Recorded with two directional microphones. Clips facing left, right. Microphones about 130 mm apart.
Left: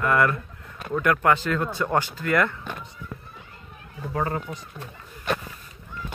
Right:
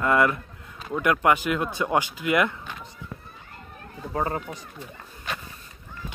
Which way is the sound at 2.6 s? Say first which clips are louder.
Left 3 dB; 50° left (ahead or behind).